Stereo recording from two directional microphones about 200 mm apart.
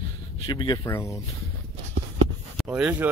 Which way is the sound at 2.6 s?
5° right (ahead or behind).